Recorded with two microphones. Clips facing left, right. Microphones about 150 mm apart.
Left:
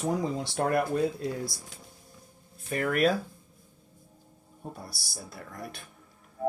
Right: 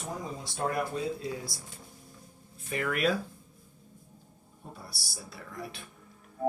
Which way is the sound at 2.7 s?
45° left (ahead or behind).